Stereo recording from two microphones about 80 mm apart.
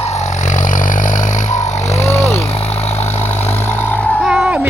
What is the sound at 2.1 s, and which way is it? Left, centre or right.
Vehicle, left.